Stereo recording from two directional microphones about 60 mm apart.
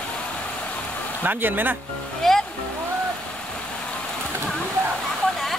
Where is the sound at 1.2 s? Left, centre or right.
Right.